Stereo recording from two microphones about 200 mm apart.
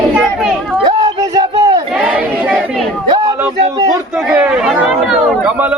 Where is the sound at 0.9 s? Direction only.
20° right (ahead or behind).